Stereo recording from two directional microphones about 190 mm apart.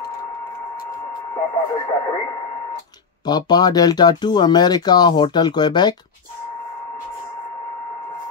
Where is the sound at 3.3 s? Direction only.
20° left (ahead or behind).